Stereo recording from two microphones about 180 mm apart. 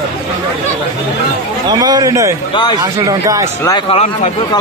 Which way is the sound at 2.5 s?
25° left (ahead or behind).